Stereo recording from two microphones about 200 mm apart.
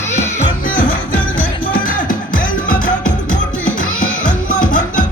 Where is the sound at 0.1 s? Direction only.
35° left (ahead or behind).